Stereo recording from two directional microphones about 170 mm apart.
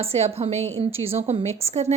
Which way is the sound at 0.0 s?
35° right (ahead or behind).